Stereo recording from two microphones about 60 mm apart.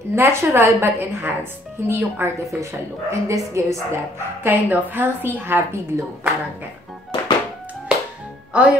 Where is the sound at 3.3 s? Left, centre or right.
Right.